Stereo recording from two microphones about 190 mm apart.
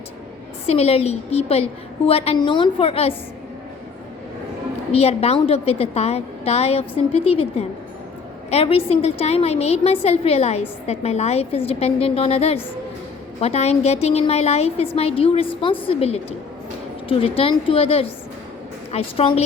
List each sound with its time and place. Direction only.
0.7 s a woman's voice: 30° left (ahead or behind)
4.9 s a woman's voice: 30° left (ahead or behind)